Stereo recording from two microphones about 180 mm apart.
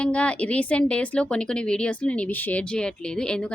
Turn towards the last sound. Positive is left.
turn(degrees=5)  # may be behind; listen again after turning